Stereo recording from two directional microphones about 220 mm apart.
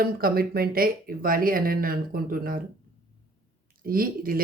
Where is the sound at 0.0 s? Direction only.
40° right (ahead or behind).